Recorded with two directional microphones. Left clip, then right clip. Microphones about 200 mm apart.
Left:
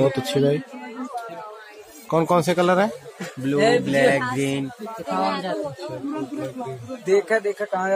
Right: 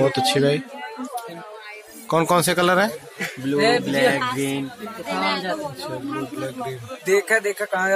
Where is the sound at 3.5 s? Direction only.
50° left (ahead or behind).